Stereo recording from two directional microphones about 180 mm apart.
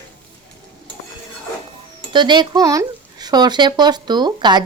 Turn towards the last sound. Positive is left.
turn(degrees=-25)  # may be behind; listen again after turning